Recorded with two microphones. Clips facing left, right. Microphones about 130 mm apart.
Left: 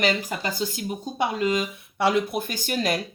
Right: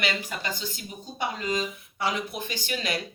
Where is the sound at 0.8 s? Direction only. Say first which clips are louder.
Left 7 dB; 55° left (ahead or behind).